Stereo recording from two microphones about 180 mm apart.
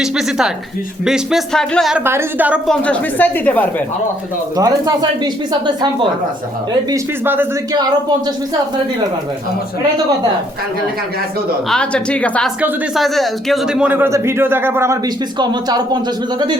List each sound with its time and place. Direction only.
0.0 s speech: 5° right (ahead or behind)
2.0 s speech: 10° right (ahead or behind)
2.6 s a woman's voice: 5° left (ahead or behind)
4.5 s speech: 20° right (ahead or behind)
11.7 s speech: 5° left (ahead or behind); by 16.0 s 20° right (ahead or behind)